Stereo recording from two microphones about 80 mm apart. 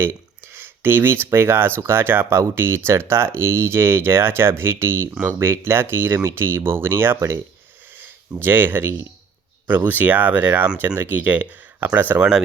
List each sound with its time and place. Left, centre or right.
0.0 s speech: right